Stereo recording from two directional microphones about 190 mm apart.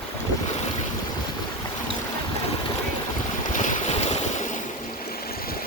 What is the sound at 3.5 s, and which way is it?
Boat, 40° left (ahead or behind).